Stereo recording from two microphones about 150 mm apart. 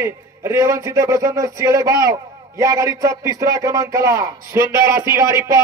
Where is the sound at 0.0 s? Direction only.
20° right (ahead or behind).